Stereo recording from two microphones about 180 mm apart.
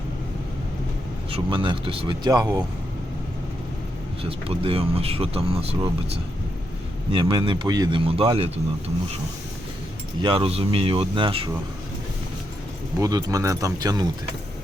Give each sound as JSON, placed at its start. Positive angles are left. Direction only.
{"t": 1.3, "sound": "a man's voice", "side_deg": -25}
{"t": 4.2, "sound": "speech", "side_deg": -30}
{"t": 7.1, "sound": "a man's voice", "side_deg": -30}
{"t": 10.2, "sound": "a man's voice", "side_deg": -25}
{"t": 13.0, "sound": "a man's voice", "side_deg": -20}